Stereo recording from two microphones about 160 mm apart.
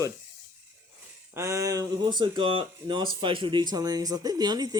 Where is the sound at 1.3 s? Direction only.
20° right (ahead or behind).